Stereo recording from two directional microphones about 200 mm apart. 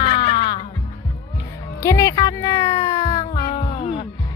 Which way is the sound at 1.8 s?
15° left (ahead or behind).